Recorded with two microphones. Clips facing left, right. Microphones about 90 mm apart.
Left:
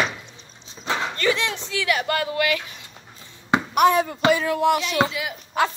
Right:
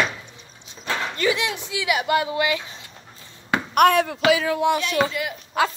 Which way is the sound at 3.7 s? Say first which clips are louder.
Right 2 dB; 65° right (ahead or behind).